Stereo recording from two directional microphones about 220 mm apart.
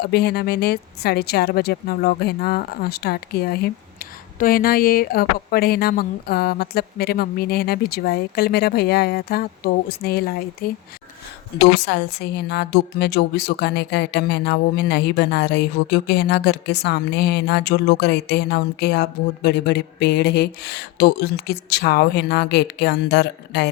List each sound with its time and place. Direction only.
0.0 s a woman's voice: 45° left (ahead or behind)